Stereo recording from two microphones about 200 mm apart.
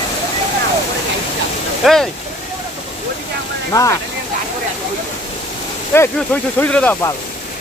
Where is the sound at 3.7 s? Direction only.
15° left (ahead or behind).